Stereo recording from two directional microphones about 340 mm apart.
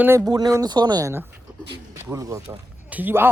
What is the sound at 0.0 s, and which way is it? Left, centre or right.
Speech, centre.